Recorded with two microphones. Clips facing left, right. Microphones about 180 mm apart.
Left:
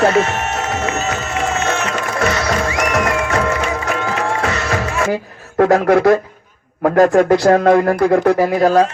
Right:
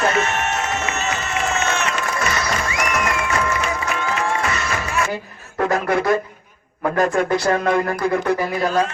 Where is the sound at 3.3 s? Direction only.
60° left (ahead or behind).